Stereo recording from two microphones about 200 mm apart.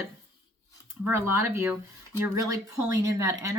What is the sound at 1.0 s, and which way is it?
Speech, 10° right (ahead or behind).